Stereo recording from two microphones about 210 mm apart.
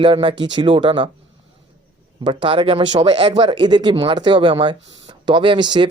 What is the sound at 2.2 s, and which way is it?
Speech, 25° right (ahead or behind).